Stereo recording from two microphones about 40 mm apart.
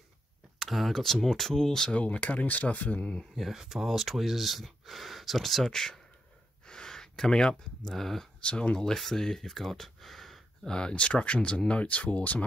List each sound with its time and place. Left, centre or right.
0.6 s speech: centre
2.0 s speech: left
3.5 s speech: centre
6.6 s gasp: centre
7.9 s speech: centre
8.4 s speech: left; by 10.4 s centre
10.6 s speech: left